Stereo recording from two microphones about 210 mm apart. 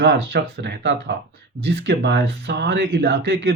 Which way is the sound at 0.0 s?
55° right (ahead or behind).